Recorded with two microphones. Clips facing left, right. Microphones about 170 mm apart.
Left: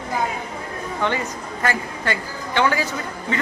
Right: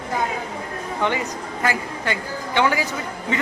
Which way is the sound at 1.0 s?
15° right (ahead or behind).